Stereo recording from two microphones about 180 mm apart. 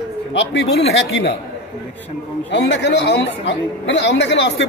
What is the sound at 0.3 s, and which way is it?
Speech, 85° left.